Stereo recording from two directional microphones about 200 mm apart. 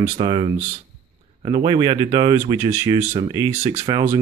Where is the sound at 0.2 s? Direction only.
25° right (ahead or behind).